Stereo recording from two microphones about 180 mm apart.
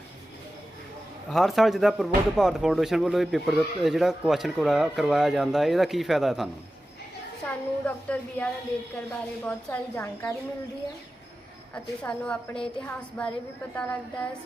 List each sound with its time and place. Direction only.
1.3 s a woman's voice: centre (ahead or behind)
11.7 s a woman's voice: 5° left (ahead or behind)